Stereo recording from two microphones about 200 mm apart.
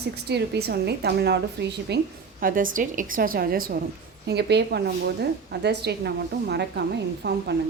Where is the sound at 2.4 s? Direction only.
45° right (ahead or behind).